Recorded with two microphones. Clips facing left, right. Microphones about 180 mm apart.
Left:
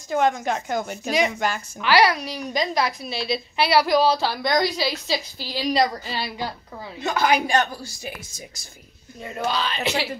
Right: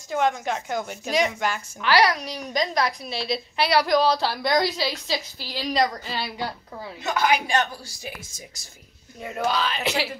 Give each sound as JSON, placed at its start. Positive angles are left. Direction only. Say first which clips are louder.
{"t": 0.1, "sound": "a woman's voice", "louder": "left 2 dB", "side_deg": 45}
{"t": 1.9, "sound": "a woman's voice", "louder": "left 2 dB", "side_deg": 5}
{"t": 6.1, "sound": "a woman's voice", "louder": "left 1 dB", "side_deg": 0}
{"t": 7.0, "sound": "speech", "louder": "left 2 dB", "side_deg": 30}
{"t": 9.2, "sound": "a woman's voice", "louder": "right 1 dB", "side_deg": -5}